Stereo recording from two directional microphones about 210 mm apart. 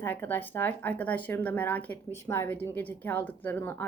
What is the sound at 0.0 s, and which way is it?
A woman's voice, 10° left (ahead or behind).